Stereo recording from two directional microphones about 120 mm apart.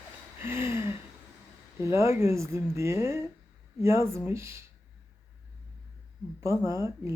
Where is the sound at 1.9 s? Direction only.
25° right (ahead or behind).